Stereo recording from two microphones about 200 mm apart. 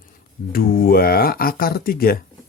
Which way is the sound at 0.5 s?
45° left (ahead or behind).